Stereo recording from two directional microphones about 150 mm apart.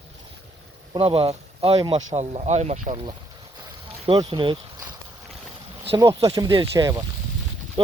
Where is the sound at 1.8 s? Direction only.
30° right (ahead or behind).